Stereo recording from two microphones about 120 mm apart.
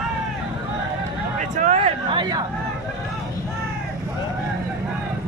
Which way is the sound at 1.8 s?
40° right (ahead or behind).